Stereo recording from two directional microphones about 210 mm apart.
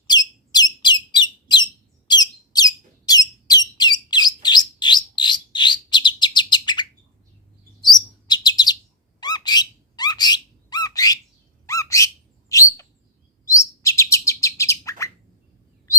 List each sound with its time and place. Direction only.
0.1 s bird: 20° left (ahead or behind)
2.0 s squeak: 20° left (ahead or behind)
3.8 s bird: 20° left (ahead or behind)
7.8 s chirp: 20° left (ahead or behind)
9.2 s squawk: 20° left (ahead or behind)
13.4 s chirp: 15° left (ahead or behind)